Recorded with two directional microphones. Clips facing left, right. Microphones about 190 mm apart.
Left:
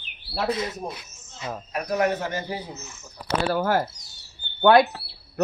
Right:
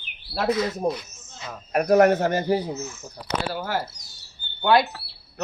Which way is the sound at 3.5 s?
50° left (ahead or behind).